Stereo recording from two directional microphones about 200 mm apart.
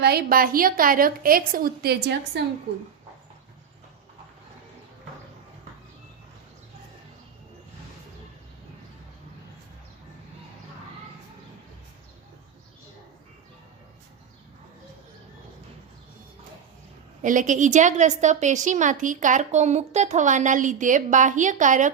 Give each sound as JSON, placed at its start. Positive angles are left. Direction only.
{"t": 0.0, "sound": "a woman's voice", "side_deg": -50}
{"t": 17.2, "sound": "a woman's voice", "side_deg": -40}